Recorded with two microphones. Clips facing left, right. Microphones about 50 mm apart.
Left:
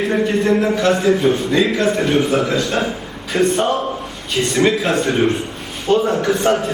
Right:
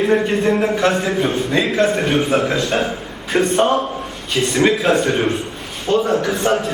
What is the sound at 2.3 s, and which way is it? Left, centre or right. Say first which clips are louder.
A man's voice: even; right.